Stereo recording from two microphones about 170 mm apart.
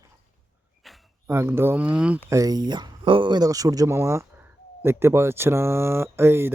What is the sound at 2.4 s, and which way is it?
Speech, 25° right (ahead or behind).